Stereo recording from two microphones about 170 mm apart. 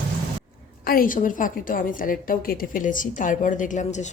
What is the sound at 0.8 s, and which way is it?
A woman's voice, 60° left (ahead or behind).